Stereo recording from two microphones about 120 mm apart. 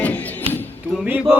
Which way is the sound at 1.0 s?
15° right (ahead or behind).